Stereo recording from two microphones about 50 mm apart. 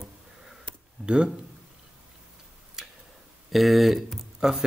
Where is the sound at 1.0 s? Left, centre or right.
Right.